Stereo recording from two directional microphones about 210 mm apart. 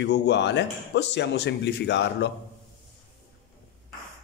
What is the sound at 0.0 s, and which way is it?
Speech, 55° left (ahead or behind).